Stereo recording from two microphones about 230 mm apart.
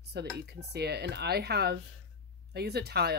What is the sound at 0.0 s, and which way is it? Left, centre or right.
Speech, right.